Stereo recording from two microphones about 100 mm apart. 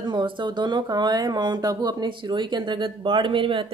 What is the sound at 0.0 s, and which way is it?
Speech, 50° right (ahead or behind).